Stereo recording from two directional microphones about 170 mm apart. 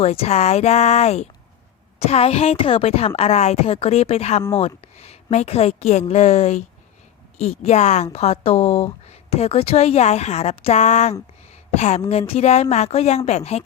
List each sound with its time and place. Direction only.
0.0 s a woman's voice: 35° left (ahead or behind)